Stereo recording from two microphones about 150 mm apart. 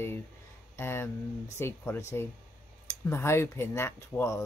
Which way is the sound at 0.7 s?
15° left (ahead or behind).